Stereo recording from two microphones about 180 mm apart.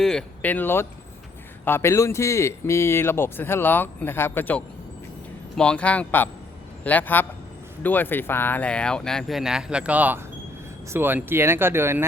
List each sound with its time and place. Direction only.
0.0 s a man's voice: 5° left (ahead or behind); by 12.0 s 15° right (ahead or behind)